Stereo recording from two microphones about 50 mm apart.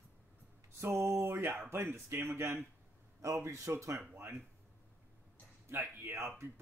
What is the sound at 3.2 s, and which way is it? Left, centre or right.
Speech, right.